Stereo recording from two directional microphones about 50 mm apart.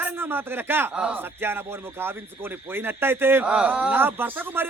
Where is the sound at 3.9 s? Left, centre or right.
Right.